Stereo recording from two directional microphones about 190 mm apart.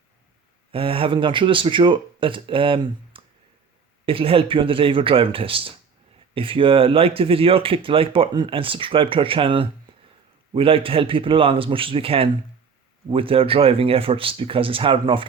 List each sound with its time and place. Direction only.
0.7 s speech: 30° right (ahead or behind)
9.9 s a sound: 25° right (ahead or behind)
10.5 s speech: 30° right (ahead or behind)